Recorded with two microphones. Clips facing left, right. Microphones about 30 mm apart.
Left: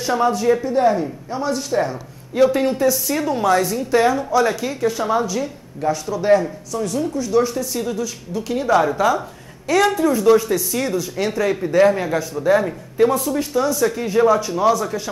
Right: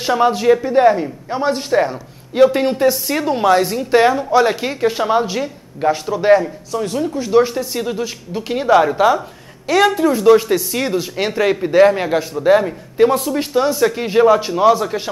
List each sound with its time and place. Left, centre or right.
0.2 s speech: right
12.9 s speech: right
13.6 s speech: right
14.2 s speech: right